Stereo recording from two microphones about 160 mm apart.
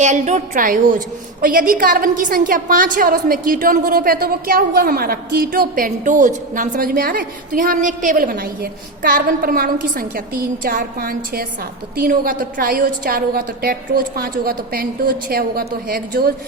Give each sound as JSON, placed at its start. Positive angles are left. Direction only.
{"t": 0.0, "sound": "a woman's voice", "side_deg": -50}